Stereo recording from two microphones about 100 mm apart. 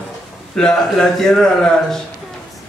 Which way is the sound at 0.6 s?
5° left (ahead or behind).